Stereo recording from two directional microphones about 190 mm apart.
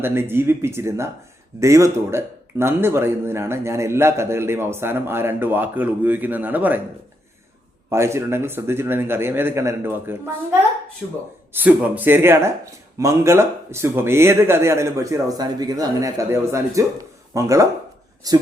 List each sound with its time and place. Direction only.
0.0 s a man's voice: 10° right (ahead or behind)
7.9 s a man's voice: 15° right (ahead or behind)
11.5 s a man's voice: 10° right (ahead or behind)